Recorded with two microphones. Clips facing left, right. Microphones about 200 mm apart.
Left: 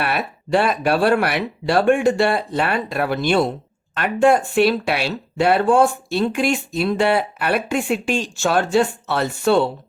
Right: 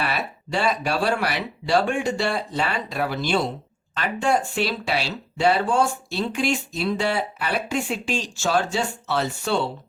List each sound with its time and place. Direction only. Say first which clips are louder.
0.0 s speech: left 4 dB; 55° left (ahead or behind)